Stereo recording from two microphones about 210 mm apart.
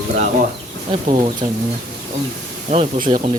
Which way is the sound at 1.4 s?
30° right (ahead or behind).